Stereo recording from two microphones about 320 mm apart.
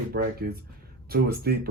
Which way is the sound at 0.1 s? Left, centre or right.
Right.